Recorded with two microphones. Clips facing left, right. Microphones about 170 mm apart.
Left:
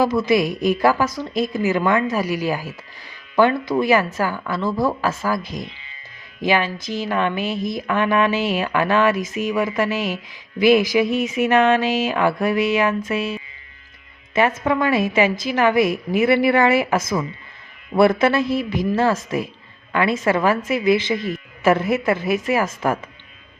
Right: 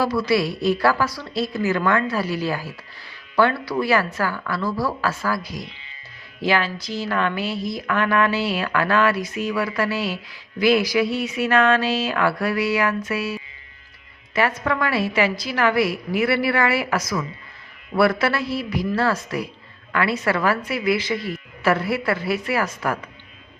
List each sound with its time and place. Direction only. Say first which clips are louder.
0.0 s a woman's voice: left 3 dB; 20° left (ahead or behind)
14.6 s a woman's voice: left 4 dB; 20° left (ahead or behind)